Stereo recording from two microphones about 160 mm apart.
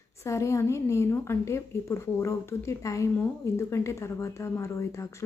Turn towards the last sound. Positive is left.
turn(degrees=20)  # may be behind; listen again after turning